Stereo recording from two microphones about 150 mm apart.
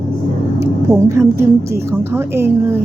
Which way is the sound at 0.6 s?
20° right (ahead or behind).